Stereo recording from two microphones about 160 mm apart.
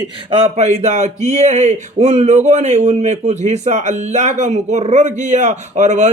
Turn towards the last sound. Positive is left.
turn(degrees=-45)  # may be behind; listen again after turning